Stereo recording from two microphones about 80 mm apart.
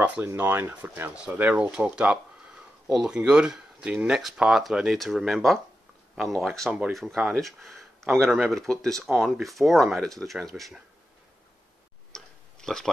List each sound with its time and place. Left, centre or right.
0.0 s speech: centre
4.2 s speech: centre
12.1 s tick-tock: centre